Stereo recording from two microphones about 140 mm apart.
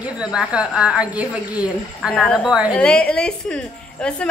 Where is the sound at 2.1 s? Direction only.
5° left (ahead or behind).